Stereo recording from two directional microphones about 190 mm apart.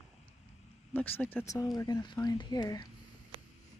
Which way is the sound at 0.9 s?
10° left (ahead or behind).